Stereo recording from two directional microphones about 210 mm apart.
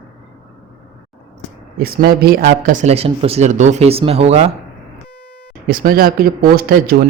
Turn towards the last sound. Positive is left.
turn(degrees=-45)  # may be behind; listen again after turning